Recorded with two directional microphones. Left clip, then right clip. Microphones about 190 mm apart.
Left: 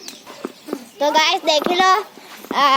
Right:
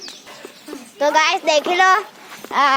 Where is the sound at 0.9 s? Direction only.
Centre (ahead or behind).